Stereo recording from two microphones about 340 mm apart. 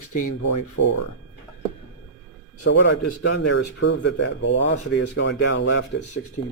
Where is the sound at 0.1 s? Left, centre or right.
Left.